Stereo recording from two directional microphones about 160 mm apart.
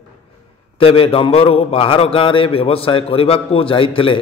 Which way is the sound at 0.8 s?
35° left (ahead or behind).